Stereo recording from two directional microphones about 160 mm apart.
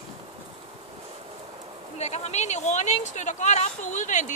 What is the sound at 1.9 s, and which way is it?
A woman's voice, 45° left (ahead or behind).